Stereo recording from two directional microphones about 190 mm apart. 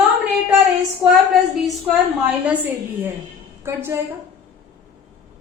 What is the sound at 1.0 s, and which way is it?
A woman's voice, 5° right (ahead or behind).